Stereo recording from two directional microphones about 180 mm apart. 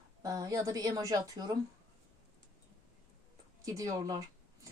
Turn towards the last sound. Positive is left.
turn(degrees=-20)  # may be behind; listen again after turning